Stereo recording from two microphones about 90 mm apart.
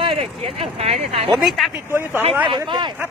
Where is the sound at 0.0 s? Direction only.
90° right.